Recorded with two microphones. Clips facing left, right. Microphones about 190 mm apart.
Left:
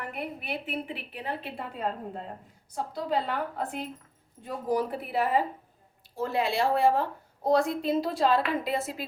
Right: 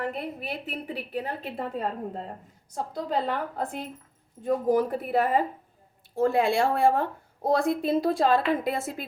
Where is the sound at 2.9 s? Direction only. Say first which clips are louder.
Right 1 dB; 45° right (ahead or behind).